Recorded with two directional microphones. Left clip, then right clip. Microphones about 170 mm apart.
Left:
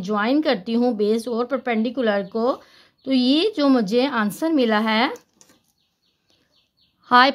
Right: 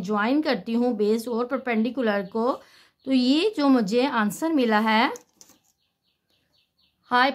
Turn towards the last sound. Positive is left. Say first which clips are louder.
# left 6 dB
turn(degrees=35)  # may be behind; listen again after turning